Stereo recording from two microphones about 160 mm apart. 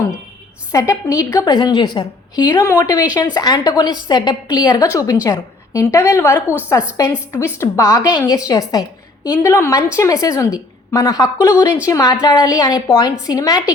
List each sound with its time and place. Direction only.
0.7 s a woman's voice: 20° left (ahead or behind)